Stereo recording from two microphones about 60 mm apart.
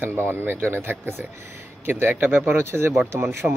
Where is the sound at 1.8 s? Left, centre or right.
Right.